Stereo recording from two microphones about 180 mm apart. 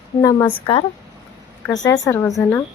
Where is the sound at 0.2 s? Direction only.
20° left (ahead or behind).